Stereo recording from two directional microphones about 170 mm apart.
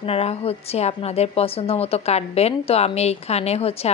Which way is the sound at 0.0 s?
35° left (ahead or behind).